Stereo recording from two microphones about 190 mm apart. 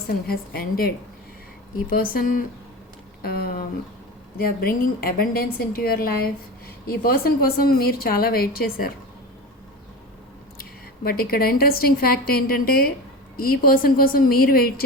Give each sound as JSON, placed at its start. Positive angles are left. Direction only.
{"t": 0.1, "sound": "a woman's voice", "side_deg": 55}
{"t": 10.6, "sound": "a woman's voice", "side_deg": 50}